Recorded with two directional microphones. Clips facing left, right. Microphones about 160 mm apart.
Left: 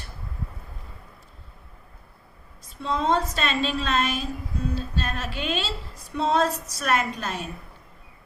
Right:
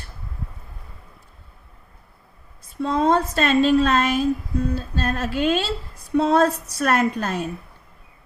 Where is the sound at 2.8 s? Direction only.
50° right (ahead or behind).